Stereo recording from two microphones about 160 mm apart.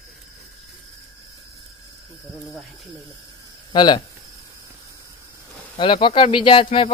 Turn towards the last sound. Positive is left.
turn(degrees=30)  # may be behind; listen again after turning